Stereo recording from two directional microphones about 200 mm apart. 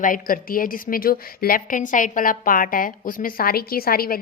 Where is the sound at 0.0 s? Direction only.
45° left (ahead or behind).